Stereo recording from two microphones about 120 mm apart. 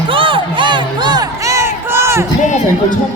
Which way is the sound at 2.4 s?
90° left.